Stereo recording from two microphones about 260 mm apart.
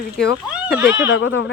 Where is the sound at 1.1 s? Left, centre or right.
Left.